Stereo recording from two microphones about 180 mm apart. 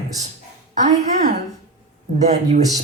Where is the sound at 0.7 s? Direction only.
40° right (ahead or behind).